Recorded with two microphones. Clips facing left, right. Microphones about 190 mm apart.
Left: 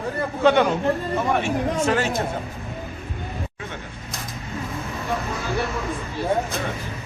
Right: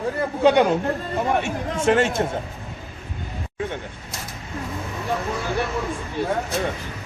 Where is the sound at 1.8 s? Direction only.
25° right (ahead or behind).